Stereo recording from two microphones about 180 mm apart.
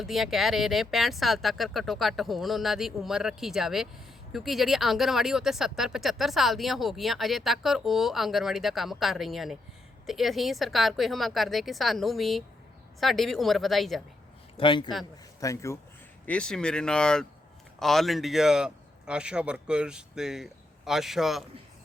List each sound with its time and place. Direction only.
0.0 s speech: centre (ahead or behind)
14.5 s a man's voice: 25° left (ahead or behind)
15.4 s speech: 15° left (ahead or behind)
16.2 s speech: 5° left (ahead or behind)